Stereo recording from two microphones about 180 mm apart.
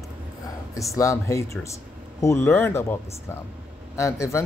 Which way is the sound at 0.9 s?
15° left (ahead or behind).